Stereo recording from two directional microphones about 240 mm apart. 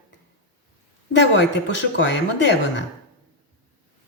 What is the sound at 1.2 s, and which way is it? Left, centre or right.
Speech, left.